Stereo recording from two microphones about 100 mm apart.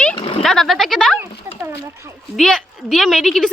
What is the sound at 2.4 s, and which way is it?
A woman's voice, 5° left (ahead or behind).